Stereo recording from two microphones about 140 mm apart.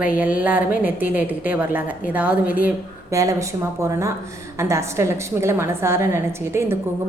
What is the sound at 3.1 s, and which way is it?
Speech, 25° right (ahead or behind).